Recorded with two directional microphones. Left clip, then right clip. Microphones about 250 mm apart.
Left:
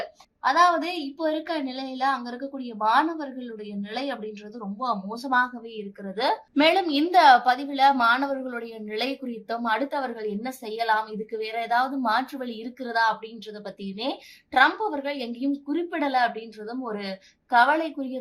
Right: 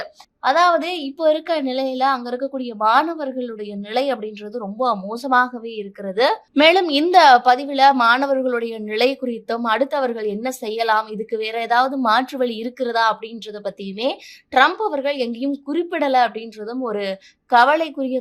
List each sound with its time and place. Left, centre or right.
0.4 s a woman's voice: right